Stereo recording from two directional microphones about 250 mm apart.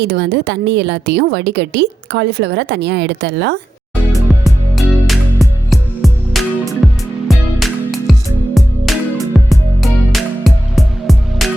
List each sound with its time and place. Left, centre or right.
0.0 s a woman's voice: right
4.1 s music: centre